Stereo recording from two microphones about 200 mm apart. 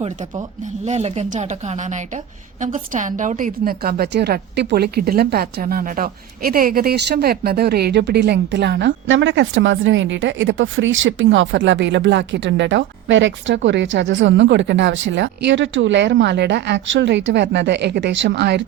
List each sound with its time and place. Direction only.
0.0 s a woman's voice: 35° right (ahead or behind); by 18.6 s 60° right (ahead or behind)